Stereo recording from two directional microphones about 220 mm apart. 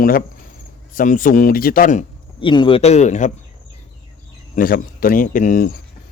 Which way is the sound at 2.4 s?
20° left (ahead or behind).